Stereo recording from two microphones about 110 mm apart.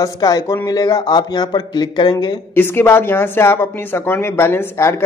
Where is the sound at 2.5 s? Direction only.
20° left (ahead or behind).